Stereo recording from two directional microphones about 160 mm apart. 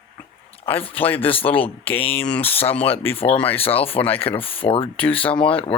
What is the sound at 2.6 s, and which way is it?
Speech, 40° left (ahead or behind).